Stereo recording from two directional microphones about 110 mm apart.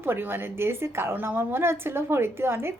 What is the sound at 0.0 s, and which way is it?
A woman's voice, 20° right (ahead or behind).